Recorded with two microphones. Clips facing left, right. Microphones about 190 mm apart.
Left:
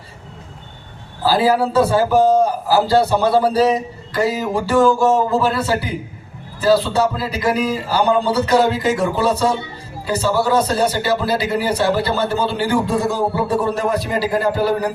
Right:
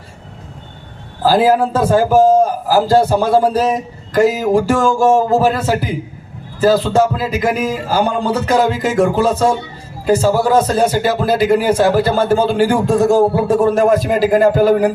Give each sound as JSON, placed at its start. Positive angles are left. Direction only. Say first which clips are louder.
{"t": 1.2, "sound": "a man's voice", "louder": "right 4 dB", "side_deg": -50}